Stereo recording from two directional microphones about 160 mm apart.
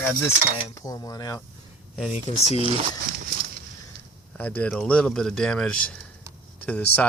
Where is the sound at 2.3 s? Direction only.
40° left (ahead or behind).